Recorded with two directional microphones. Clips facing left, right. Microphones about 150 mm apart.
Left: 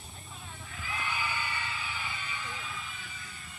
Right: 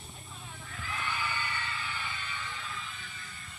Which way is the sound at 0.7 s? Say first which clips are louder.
Even; 5° left (ahead or behind).